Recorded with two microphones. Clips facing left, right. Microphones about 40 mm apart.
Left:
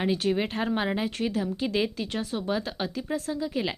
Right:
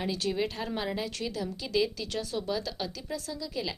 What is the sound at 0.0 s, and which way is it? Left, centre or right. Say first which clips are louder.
Speech: left 5 dB; left.